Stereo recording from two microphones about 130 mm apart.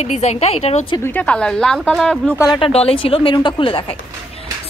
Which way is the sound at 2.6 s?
50° left (ahead or behind).